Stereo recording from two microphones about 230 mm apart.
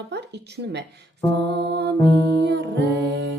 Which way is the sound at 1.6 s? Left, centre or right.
Right.